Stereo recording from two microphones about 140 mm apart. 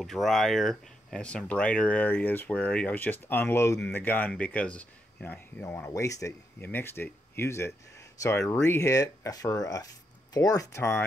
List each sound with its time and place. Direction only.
0.0 s speech: centre (ahead or behind); by 11.1 s 20° left (ahead or behind)